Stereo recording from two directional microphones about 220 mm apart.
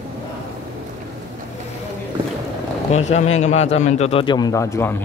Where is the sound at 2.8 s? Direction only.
30° left (ahead or behind); by 5.0 s 10° left (ahead or behind).